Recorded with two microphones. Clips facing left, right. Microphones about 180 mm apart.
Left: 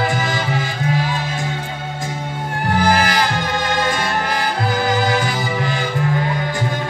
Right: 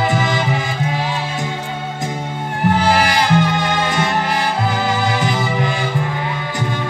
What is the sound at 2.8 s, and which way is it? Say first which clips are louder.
Music: right 2 dB; 20° right (ahead or behind).